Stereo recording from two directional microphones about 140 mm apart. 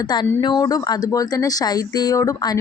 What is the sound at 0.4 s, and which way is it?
A woman's voice, 25° left (ahead or behind).